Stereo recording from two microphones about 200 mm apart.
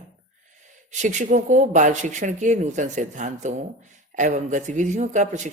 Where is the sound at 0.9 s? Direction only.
40° right (ahead or behind).